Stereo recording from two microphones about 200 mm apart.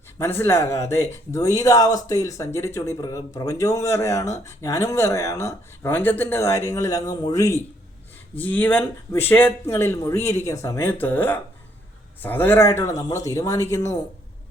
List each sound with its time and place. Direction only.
0.2 s speech: 10° left (ahead or behind)